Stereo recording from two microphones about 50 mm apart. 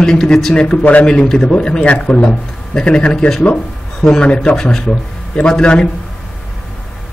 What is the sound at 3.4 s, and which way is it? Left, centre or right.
A man's voice, left.